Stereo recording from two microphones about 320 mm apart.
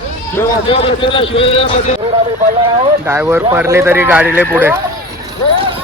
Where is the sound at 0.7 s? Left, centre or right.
Centre.